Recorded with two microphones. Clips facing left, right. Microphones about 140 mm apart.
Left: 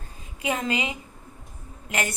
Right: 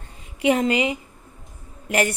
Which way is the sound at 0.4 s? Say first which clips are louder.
Right 9 dB; 30° right (ahead or behind).